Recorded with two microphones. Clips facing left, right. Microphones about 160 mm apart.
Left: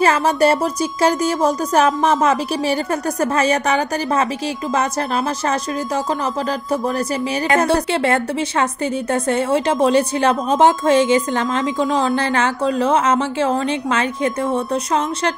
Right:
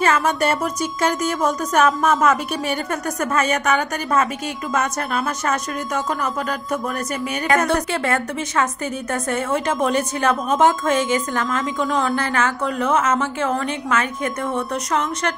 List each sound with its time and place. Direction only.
0.0 s a woman's voice: 35° left (ahead or behind)
7.4 s a woman's voice: 30° left (ahead or behind)